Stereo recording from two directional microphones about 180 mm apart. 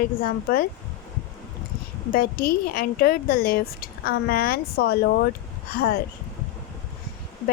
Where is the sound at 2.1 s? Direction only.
55° left (ahead or behind).